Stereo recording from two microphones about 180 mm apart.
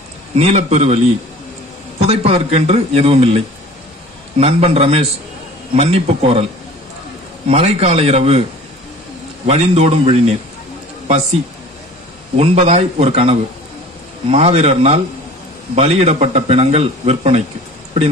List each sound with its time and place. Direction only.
0.4 s a man's voice: 35° right (ahead or behind)
7.4 s a man's voice: 30° right (ahead or behind)
9.5 s a man's voice: 35° right (ahead or behind)
12.4 s a man's voice: 35° right (ahead or behind)